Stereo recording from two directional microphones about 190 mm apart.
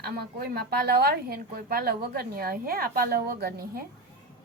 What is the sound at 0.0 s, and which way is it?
A woman's voice, 55° right (ahead or behind).